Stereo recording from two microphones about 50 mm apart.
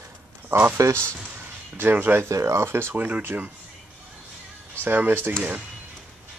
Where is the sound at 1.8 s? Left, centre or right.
Right.